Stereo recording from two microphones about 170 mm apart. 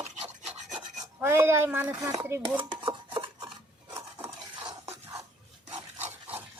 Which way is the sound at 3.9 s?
15° right (ahead or behind).